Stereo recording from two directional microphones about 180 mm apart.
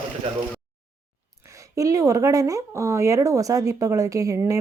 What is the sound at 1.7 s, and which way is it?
Speech, 20° right (ahead or behind).